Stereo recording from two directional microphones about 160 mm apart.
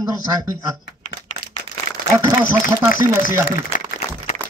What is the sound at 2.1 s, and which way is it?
Speech, 20° right (ahead or behind).